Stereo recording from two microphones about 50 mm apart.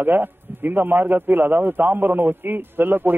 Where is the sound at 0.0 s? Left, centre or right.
Right.